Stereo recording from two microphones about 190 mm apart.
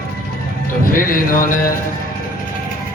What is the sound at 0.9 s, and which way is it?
Music, 45° left (ahead or behind).